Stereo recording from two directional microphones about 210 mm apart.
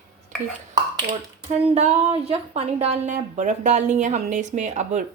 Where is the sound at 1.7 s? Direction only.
30° right (ahead or behind).